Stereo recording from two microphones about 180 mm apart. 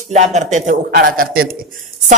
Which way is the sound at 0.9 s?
55° right (ahead or behind).